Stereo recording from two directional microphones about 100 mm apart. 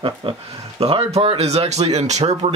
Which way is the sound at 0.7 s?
80° right.